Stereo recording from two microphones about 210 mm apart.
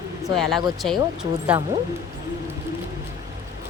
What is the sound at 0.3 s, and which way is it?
Speech, centre (ahead or behind).